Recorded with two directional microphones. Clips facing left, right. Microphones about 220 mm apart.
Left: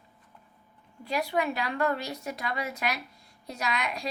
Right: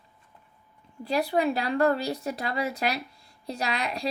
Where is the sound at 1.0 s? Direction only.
35° right (ahead or behind).